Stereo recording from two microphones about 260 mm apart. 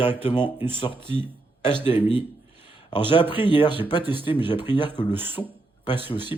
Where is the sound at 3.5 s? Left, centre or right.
Centre.